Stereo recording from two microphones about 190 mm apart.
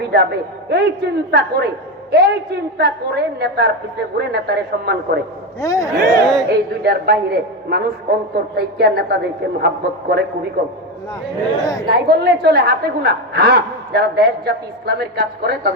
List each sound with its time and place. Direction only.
0.0 s a woman's voice: 55° right (ahead or behind)
5.5 s a man's voice: 20° left (ahead or behind)
6.0 s speech: 45° right (ahead or behind)
6.5 s a woman's voice: 55° right (ahead or behind)
11.6 s a man's voice: 20° left (ahead or behind)
11.9 s a woman's voice: 60° right (ahead or behind)